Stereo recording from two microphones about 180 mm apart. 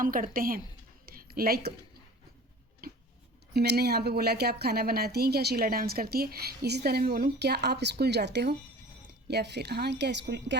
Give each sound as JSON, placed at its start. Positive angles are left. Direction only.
{"t": 0.0, "sound": "a woman's voice", "side_deg": -50}
{"t": 1.0, "sound": "a sound", "side_deg": -55}
{"t": 3.5, "sound": "a woman's voice", "side_deg": -65}